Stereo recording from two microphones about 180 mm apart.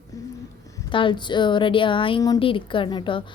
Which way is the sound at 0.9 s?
30° left (ahead or behind).